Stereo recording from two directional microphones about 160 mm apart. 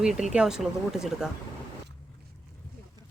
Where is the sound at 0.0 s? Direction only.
5° right (ahead or behind).